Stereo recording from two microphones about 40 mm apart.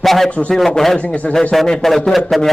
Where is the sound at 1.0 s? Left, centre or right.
Left.